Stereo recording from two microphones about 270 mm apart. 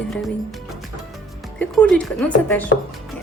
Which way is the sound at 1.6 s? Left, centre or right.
Centre.